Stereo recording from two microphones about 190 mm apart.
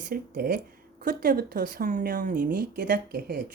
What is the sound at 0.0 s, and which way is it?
A woman's voice, 50° right (ahead or behind).